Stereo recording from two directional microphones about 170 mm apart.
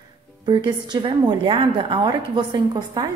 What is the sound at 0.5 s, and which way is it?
A woman's voice, 25° right (ahead or behind).